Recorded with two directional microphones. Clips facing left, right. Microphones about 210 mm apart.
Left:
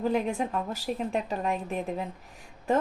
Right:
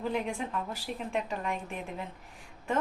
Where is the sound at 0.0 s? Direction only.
40° left (ahead or behind).